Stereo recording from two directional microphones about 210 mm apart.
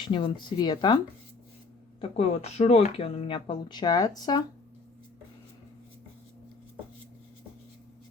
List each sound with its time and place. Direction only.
0.0 s speech: 20° left (ahead or behind)
2.0 s speech: 30° left (ahead or behind)